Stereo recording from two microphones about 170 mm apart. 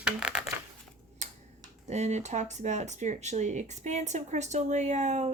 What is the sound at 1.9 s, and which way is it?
Speech, 40° right (ahead or behind).